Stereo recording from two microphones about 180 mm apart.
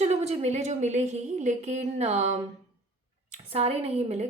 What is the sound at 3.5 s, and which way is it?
Speech, 35° right (ahead or behind).